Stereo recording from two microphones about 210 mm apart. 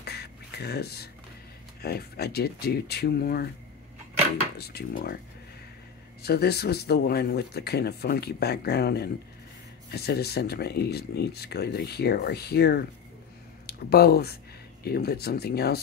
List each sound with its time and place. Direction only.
0.0 s a sound: 50° left (ahead or behind)
1.8 s speech: 50° left (ahead or behind)
4.6 s speech: 50° left (ahead or behind)
6.2 s speech: 50° left (ahead or behind)